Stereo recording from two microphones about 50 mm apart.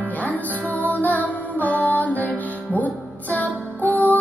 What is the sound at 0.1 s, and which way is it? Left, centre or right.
Music, left.